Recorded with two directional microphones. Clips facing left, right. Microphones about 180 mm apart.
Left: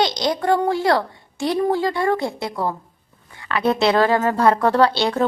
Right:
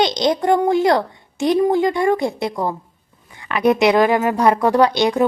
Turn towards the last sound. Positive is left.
turn(degrees=-15)  # may be behind; listen again after turning